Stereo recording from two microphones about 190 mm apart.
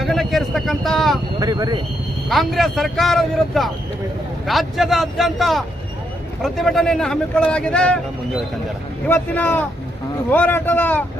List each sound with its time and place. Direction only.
0.0 s vehicle: centre (ahead or behind)
1.4 s speech: 20° right (ahead or behind)
2.3 s speech: centre (ahead or behind)
9.0 s speech: 10° left (ahead or behind)